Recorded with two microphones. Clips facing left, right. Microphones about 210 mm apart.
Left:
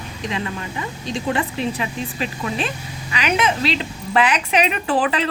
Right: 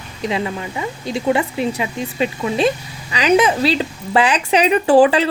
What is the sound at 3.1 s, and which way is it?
A woman's voice, 35° right (ahead or behind).